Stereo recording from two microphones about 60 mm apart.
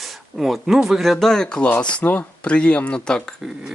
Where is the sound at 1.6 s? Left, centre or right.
Left.